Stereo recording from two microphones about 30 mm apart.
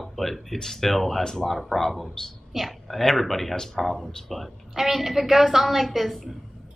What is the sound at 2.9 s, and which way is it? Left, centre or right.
Speech, centre.